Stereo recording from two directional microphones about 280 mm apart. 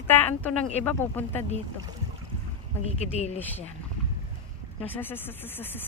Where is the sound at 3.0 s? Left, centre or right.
Left.